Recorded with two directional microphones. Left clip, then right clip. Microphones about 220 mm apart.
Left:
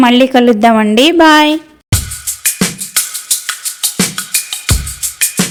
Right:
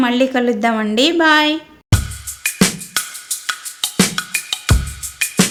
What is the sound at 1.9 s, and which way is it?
Music, centre (ahead or behind).